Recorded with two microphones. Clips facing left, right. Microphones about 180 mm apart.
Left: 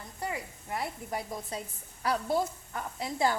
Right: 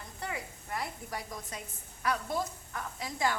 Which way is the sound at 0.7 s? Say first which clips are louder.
Left 3 dB; 25° left (ahead or behind).